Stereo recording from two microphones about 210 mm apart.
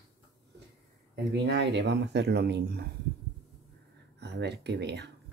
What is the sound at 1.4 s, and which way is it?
Speech, 55° right (ahead or behind).